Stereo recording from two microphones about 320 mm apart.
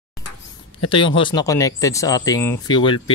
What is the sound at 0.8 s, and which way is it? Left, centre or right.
Speech, centre.